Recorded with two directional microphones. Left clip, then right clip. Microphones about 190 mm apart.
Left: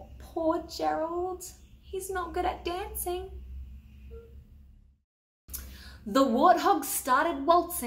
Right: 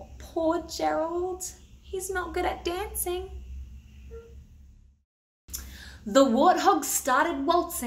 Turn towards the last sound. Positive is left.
turn(degrees=-5)  # may be behind; listen again after turning